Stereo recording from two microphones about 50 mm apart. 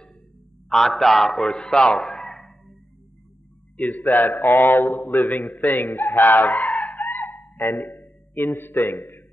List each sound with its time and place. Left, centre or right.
0.7 s a man's voice: centre
3.7 s speech: left
6.7 s chicken: left
7.2 s fowl: left
8.0 s a sound: left
8.8 s a man's voice: left